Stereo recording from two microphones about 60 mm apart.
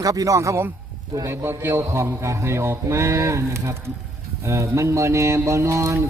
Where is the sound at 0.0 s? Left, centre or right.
Right.